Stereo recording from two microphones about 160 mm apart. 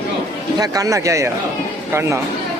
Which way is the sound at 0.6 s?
20° right (ahead or behind).